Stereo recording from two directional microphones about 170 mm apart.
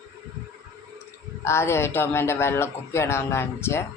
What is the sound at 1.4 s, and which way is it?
A man's voice, 15° left (ahead or behind).